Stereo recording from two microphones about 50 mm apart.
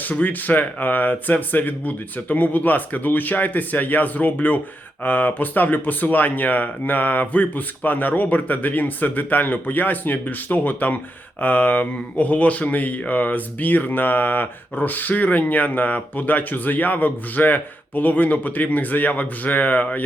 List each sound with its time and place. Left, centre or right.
0.0 s speech: left